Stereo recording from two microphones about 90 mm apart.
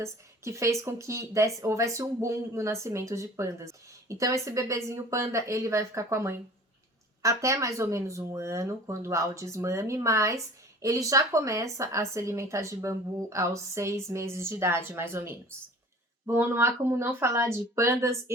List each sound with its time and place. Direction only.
0.0 s speech: 35° right (ahead or behind)